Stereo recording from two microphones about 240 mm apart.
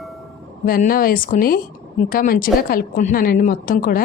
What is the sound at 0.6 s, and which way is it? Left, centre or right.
A woman's voice, left.